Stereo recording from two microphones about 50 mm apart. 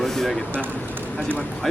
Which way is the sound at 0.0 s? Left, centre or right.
Centre.